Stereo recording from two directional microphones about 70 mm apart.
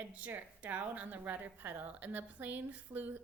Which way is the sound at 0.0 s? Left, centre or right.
Right.